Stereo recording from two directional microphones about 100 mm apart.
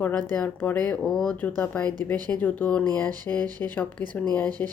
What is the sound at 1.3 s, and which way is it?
A woman's voice, 20° left (ahead or behind).